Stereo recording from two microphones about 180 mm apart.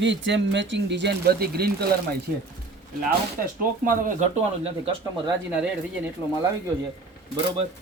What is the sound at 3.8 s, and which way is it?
Speech, 45° right (ahead or behind).